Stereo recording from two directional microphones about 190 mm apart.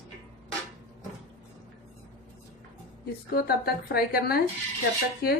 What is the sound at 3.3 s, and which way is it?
A woman's voice, 55° left (ahead or behind).